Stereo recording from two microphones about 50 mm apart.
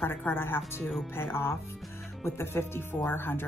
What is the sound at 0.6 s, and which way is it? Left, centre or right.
Speech, centre.